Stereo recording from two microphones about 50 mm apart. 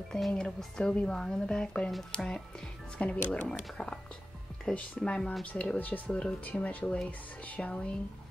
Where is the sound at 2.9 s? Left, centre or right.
Left.